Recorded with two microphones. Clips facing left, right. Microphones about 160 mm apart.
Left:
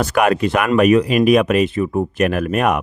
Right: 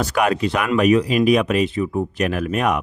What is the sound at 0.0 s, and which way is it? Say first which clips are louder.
Speech: left 3 dB; 55° left (ahead or behind).